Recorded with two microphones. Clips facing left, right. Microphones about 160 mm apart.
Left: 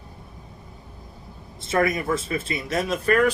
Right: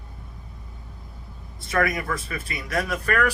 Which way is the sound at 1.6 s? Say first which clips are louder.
Left 2 dB; 25° left (ahead or behind).